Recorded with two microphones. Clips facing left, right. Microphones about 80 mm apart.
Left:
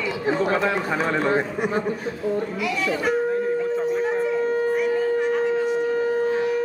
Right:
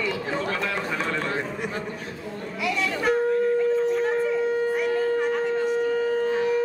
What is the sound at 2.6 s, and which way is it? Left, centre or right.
Speech, centre.